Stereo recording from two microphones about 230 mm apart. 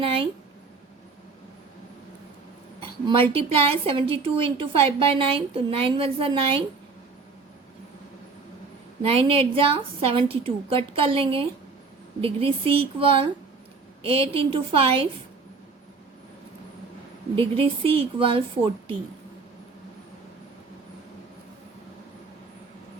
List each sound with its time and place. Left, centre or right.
0.0 s a sound: right
3.1 s a woman's voice: right
9.0 s a woman's voice: right
17.3 s a woman's voice: right